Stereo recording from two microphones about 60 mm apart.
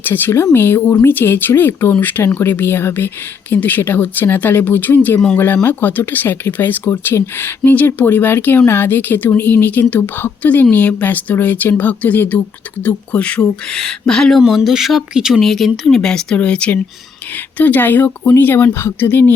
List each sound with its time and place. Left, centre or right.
0.0 s speech: left
13.4 s speech: centre
14.3 s speech: centre
15.4 s speech: centre
16.0 s speech: centre
17.6 s speech: left